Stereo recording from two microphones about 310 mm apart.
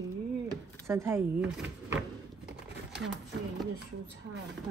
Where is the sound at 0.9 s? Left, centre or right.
Centre.